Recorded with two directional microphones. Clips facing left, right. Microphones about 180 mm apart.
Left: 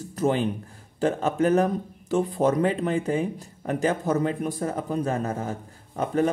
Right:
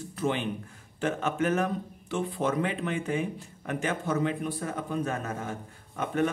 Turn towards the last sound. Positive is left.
turn(degrees=35)  # may be behind; listen again after turning